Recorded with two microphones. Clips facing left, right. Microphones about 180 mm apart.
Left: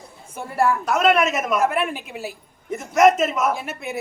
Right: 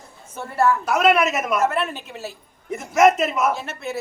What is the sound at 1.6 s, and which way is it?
Speech, 10° left (ahead or behind).